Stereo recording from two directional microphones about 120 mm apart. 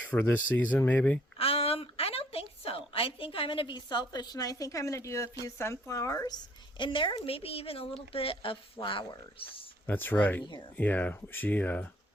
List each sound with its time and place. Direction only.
0.0 s speech: 15° left (ahead or behind)
1.4 s a woman's voice: 55° left (ahead or behind); by 6.3 s 25° left (ahead or behind)
6.7 s speech: 45° left (ahead or behind)
9.8 s speech: 15° left (ahead or behind)